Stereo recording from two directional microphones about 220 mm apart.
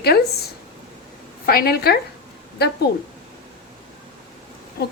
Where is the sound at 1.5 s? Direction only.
45° left (ahead or behind).